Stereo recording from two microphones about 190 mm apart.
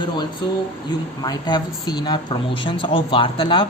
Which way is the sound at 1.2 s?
20° left (ahead or behind).